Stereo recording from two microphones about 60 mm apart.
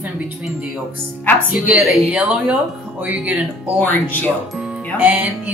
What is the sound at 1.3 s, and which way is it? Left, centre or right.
Speech, left.